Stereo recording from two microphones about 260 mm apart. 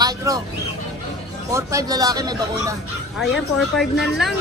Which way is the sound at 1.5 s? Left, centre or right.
Centre.